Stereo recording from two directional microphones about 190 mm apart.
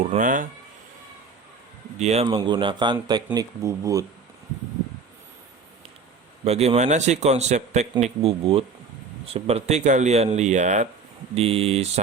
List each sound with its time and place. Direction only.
0.0 s speech: 40° right (ahead or behind)
2.0 s speech: 35° right (ahead or behind)
2.2 s a man's voice: 25° right (ahead or behind)
6.4 s speech: 35° right (ahead or behind)